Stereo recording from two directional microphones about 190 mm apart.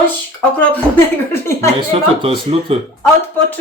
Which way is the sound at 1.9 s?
30° right (ahead or behind).